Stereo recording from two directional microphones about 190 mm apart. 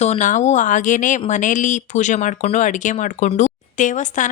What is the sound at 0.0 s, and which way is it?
Speech, 35° left (ahead or behind).